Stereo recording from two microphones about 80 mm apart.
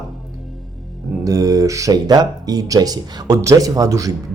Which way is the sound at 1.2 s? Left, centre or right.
Right.